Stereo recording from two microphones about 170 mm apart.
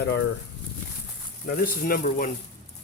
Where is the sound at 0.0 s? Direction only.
75° left (ahead or behind).